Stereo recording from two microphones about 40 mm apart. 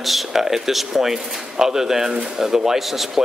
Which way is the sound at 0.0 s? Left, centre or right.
Centre.